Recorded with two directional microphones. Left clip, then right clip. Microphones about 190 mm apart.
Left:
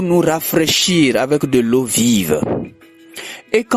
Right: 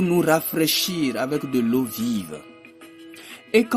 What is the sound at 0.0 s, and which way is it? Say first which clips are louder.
Speech: left 4 dB; 45° left (ahead or behind).